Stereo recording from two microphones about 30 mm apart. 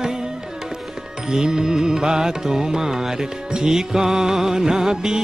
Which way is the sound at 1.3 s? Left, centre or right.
Right.